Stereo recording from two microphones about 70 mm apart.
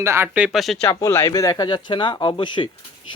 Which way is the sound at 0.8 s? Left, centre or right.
Left.